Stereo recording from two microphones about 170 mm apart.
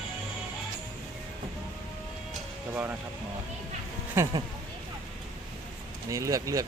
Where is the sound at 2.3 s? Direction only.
10° right (ahead or behind).